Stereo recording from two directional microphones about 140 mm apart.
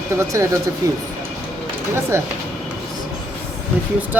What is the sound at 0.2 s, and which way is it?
Speech, 20° right (ahead or behind).